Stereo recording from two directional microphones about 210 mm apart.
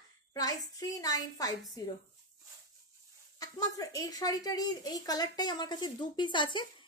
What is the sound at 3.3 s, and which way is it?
A woman's voice, 15° left (ahead or behind).